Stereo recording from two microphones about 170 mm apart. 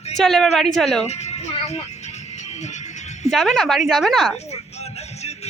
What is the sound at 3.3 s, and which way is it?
A woman's voice, centre (ahead or behind).